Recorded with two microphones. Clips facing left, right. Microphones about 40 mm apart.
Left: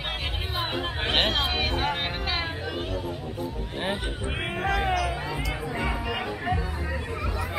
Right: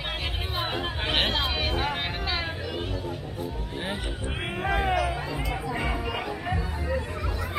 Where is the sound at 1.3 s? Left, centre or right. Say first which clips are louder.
Left 1 dB; left.